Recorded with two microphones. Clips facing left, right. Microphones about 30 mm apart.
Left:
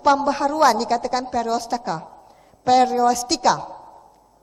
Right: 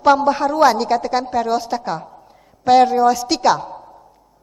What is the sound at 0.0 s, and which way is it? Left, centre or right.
A woman's voice, centre.